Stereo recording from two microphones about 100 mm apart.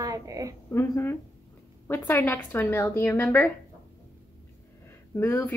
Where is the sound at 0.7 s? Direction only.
25° left (ahead or behind).